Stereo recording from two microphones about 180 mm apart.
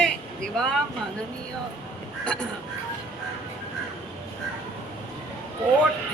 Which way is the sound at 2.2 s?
5° left (ahead or behind).